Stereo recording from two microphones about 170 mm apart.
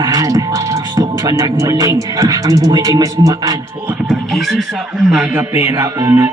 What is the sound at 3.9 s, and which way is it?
Speech, 5° right (ahead or behind).